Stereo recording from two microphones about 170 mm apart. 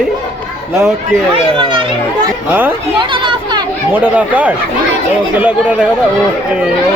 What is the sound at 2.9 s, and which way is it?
Speech, 30° right (ahead or behind).